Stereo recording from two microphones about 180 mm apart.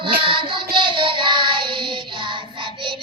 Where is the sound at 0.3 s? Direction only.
30° right (ahead or behind).